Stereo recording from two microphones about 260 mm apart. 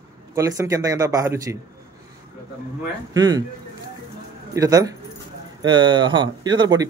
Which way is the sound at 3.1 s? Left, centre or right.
Centre.